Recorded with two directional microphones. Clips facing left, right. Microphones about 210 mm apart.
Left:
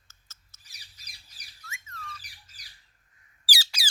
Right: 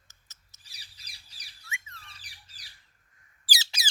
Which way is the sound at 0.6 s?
30° right (ahead or behind).